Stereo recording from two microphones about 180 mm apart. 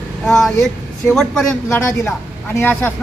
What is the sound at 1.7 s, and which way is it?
A woman's voice, 15° left (ahead or behind).